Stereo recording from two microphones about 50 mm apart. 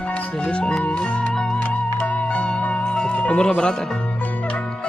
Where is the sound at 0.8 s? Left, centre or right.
Left.